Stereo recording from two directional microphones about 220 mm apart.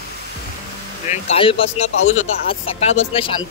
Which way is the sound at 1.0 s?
30° left (ahead or behind).